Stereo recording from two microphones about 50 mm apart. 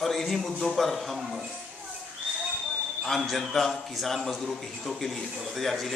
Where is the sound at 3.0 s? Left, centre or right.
Centre.